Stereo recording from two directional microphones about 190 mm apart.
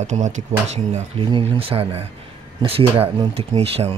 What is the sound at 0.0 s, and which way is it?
Speech, 40° right (ahead or behind).